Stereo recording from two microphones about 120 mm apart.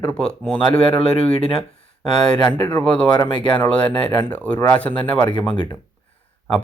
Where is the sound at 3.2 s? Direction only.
40° left (ahead or behind).